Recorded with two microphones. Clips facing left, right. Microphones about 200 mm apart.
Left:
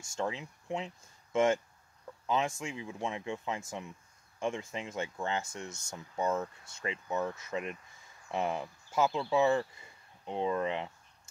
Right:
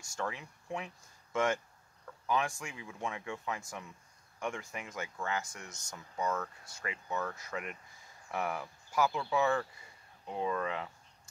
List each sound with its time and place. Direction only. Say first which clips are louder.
0.0 s speech: left 3 dB; 25° left (ahead or behind)